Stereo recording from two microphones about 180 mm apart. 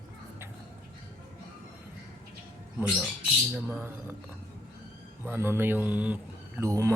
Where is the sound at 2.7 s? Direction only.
Centre (ahead or behind).